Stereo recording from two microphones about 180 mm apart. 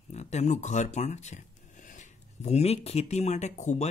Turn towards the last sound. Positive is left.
turn(degrees=40)  # may be behind; listen again after turning